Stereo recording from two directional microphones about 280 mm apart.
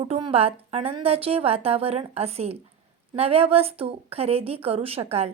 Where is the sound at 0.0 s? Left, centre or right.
Centre.